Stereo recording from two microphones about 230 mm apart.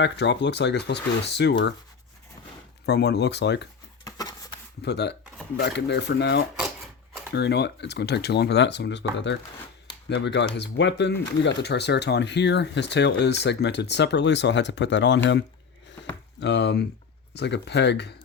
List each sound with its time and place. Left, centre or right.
0.0 s speech: left
2.8 s speech: left
4.0 s a sound: centre
4.8 s speech: left